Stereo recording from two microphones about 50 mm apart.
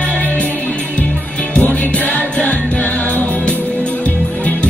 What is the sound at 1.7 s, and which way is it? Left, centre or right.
Music, left.